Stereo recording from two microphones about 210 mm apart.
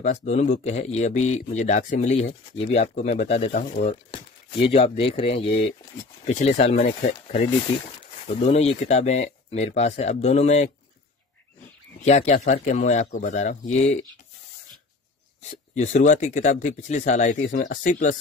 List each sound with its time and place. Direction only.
0.0 s speech: 35° left (ahead or behind)
12.0 s speech: 35° left (ahead or behind)
15.5 s speech: 35° left (ahead or behind)